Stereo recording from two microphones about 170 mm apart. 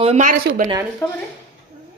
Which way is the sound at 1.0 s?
15° left (ahead or behind).